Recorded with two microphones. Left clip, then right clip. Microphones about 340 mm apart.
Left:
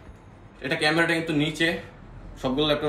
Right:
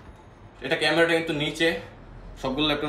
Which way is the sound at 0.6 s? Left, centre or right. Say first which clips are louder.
Right 1 dB; centre.